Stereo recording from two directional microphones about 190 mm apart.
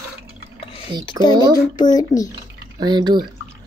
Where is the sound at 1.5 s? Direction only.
20° left (ahead or behind).